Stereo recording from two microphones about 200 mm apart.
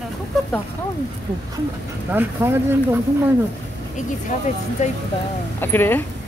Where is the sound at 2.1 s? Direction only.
10° right (ahead or behind).